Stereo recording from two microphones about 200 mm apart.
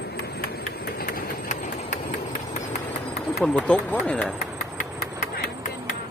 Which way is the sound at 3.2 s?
Centre (ahead or behind).